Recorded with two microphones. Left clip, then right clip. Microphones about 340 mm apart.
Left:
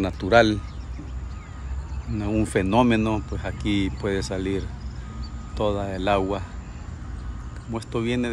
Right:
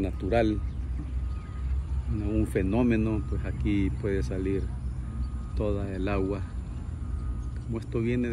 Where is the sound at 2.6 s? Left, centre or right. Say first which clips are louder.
Left 8 dB; centre.